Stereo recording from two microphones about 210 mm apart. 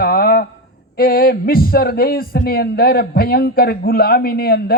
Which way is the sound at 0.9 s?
45° left (ahead or behind).